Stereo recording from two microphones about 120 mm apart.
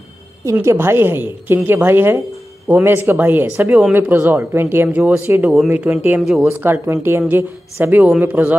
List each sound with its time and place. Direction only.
0.5 s speech: 20° right (ahead or behind)